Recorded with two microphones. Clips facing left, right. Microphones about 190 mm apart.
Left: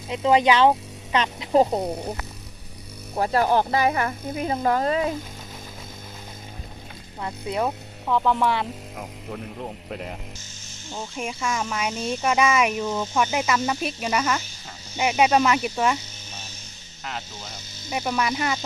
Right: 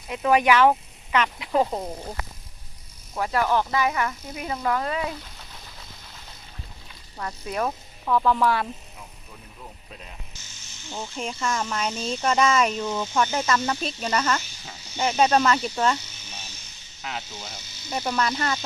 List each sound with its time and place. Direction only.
0.1 s speech: 25° left (ahead or behind)
3.2 s speech: 35° left (ahead or behind)
7.2 s speech: 15° left (ahead or behind)
9.0 s speech: 80° left
10.9 s speech: 5° left (ahead or behind)
17.0 s speech: 5° right (ahead or behind)
17.8 s speech: 10° left (ahead or behind)